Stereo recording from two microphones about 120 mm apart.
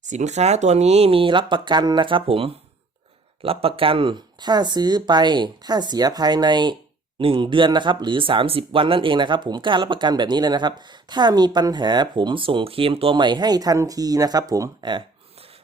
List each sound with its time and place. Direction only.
0.0 s speech: 85° right; by 15.0 s 35° right (ahead or behind)